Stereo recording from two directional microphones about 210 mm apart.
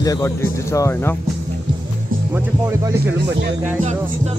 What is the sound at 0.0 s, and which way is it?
Speech, 15° left (ahead or behind).